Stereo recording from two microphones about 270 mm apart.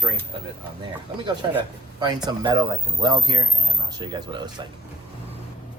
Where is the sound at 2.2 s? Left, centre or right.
Centre.